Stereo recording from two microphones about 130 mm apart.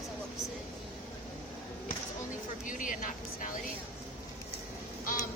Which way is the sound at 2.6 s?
90° left.